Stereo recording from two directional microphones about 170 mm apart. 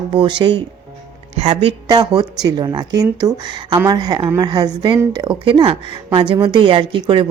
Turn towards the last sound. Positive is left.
turn(degrees=-30)  # may be behind; listen again after turning